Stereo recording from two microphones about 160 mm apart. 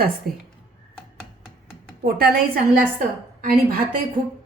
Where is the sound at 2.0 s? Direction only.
70° right (ahead or behind).